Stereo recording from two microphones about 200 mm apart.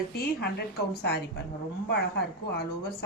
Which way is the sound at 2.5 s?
55° left (ahead or behind).